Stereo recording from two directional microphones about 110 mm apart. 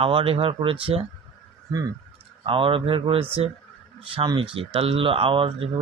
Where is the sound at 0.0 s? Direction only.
55° right (ahead or behind).